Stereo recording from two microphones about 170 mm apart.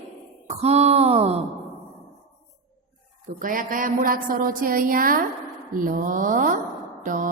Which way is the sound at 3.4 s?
50° right (ahead or behind).